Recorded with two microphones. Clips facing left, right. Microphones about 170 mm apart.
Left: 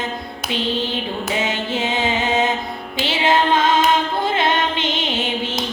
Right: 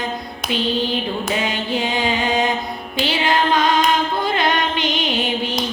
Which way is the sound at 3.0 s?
25° left (ahead or behind).